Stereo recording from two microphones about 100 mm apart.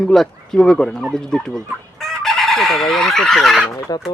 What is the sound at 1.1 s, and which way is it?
Chicken, 5° left (ahead or behind).